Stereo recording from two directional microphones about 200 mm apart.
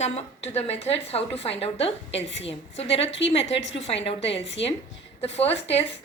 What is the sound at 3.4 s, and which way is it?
A woman's voice, 65° left (ahead or behind).